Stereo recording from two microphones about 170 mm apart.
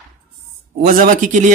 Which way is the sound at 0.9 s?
55° right (ahead or behind).